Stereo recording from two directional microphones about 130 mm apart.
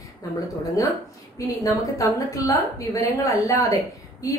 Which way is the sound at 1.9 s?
25° left (ahead or behind).